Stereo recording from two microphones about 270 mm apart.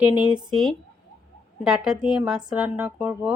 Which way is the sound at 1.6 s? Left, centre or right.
Centre.